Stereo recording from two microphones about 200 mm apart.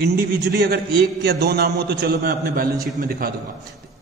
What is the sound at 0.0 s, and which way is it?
A man's voice, 50° right (ahead or behind).